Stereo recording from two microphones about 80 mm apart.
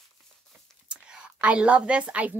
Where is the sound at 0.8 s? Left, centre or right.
Centre.